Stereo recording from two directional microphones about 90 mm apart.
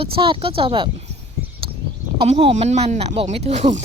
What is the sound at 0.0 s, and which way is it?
Speech, 80° right.